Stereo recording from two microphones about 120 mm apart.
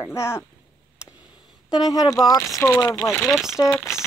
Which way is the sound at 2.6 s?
20° left (ahead or behind).